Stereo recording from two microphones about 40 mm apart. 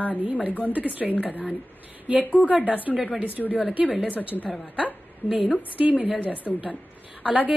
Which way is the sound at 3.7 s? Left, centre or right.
Right.